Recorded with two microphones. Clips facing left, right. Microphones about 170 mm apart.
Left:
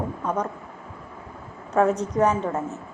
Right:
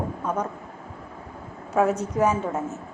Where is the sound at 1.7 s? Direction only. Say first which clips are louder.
Left 1 dB; 5° right (ahead or behind).